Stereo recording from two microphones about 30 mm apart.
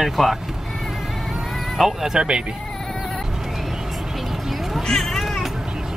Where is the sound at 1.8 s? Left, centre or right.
Centre.